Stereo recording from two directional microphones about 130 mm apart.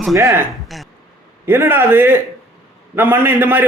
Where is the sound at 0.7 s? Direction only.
Centre (ahead or behind).